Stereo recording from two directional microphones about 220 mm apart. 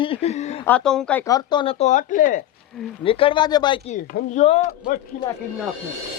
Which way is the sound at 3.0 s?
25° left (ahead or behind).